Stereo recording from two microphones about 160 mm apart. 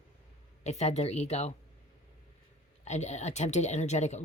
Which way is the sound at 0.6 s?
45° left (ahead or behind).